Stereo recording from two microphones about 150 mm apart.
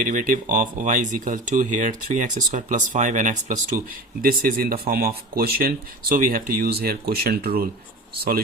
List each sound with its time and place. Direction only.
0.1 s speech: 60° right (ahead or behind); by 7.7 s 90° right